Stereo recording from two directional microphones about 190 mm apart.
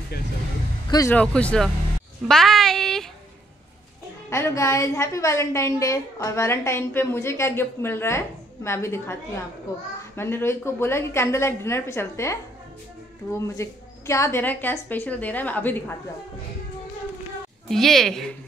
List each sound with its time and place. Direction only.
0.8 s speech: 20° left (ahead or behind)
1.1 s speech: 5° left (ahead or behind)
4.3 s a woman's voice: 15° left (ahead or behind)
17.6 s speech: centre (ahead or behind)